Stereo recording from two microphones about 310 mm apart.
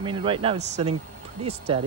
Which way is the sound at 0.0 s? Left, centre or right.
Centre.